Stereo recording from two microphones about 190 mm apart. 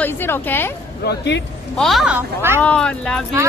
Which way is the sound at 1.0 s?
65° left (ahead or behind).